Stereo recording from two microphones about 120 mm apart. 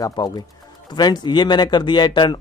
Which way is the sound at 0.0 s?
35° left (ahead or behind).